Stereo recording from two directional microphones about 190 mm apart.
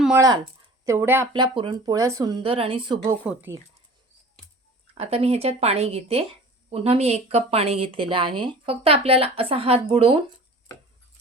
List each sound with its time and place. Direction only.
0.2 s speech: 20° right (ahead or behind)
0.9 s speech: 10° right (ahead or behind)
1.3 s speech: 25° right (ahead or behind)
3.2 s speech: 10° right (ahead or behind)
4.9 s speech: 30° right (ahead or behind)